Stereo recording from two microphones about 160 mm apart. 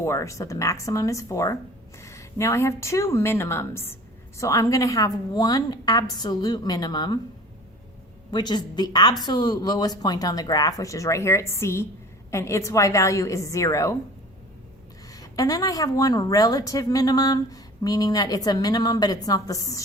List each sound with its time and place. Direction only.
0.0 s a woman's voice: 20° left (ahead or behind)
8.3 s a woman's voice: 25° left (ahead or behind)
15.1 s a woman's voice: 20° left (ahead or behind)